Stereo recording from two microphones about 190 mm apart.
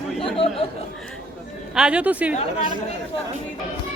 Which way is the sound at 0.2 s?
30° left (ahead or behind).